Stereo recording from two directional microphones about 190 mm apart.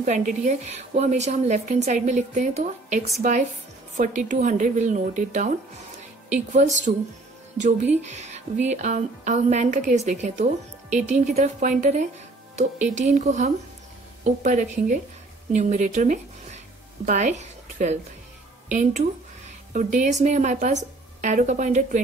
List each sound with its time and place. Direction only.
0.0 s speech: 40° right (ahead or behind)
6.5 s speech: 40° right (ahead or behind)
12.9 s speech: 40° right (ahead or behind)